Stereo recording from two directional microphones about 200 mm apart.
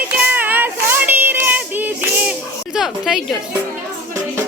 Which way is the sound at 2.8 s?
Centre (ahead or behind).